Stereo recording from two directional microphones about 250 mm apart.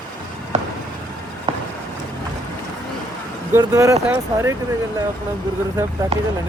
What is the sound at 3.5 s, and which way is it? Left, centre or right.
Speech, centre.